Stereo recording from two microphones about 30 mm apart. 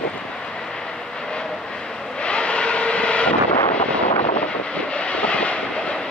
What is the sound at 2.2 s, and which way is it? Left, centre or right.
Vehicle, left.